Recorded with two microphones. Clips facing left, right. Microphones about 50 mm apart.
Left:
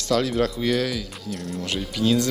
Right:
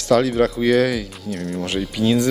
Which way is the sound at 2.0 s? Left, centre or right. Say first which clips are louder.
Right 3 dB; centre.